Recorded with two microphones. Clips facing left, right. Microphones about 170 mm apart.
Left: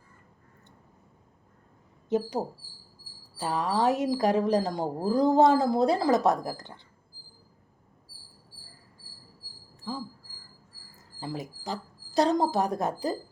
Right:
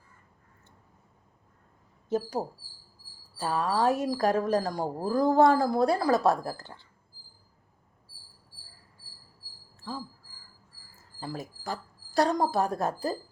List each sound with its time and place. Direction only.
2.0 s speech: 20° left (ahead or behind)
10.9 s speech: 20° left (ahead or behind)